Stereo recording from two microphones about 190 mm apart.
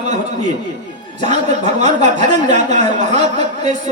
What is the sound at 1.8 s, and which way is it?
Speech, 35° right (ahead or behind).